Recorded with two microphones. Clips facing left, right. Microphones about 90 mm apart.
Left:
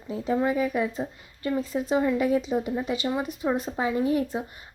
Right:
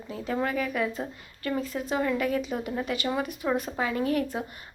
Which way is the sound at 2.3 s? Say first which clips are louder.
Left 4 dB; 25° left (ahead or behind).